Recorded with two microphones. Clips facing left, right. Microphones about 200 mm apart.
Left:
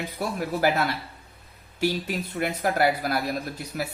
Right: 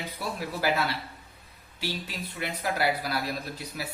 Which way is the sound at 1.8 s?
50° left (ahead or behind).